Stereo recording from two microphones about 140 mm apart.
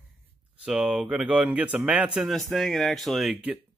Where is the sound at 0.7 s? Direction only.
5° right (ahead or behind).